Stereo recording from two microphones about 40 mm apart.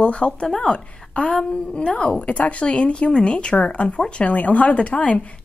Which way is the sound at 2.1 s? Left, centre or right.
Left.